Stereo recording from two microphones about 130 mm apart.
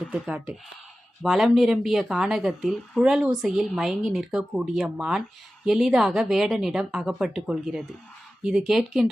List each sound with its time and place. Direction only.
0.1 s speech: 10° right (ahead or behind)